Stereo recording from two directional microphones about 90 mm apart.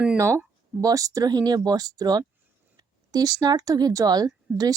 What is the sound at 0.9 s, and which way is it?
A woman's voice, 40° right (ahead or behind).